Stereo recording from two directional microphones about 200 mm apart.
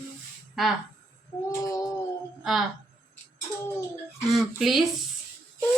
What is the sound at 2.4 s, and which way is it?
Speech, centre (ahead or behind).